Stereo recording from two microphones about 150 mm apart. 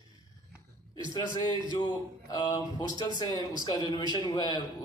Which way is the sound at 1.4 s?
25° left (ahead or behind).